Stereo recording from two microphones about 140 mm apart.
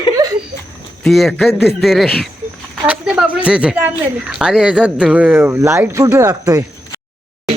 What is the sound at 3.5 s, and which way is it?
Speech, 10° right (ahead or behind).